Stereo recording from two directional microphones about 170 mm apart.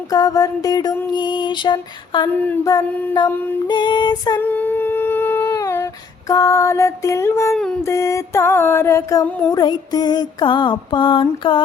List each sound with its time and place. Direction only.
0.1 s mantra: 20° left (ahead or behind)
2.3 s mantra: 10° left (ahead or behind)
2.7 s mantra: 20° left (ahead or behind)
4.4 s humming: 10° left (ahead or behind)
7.9 s mantra: 15° left (ahead or behind)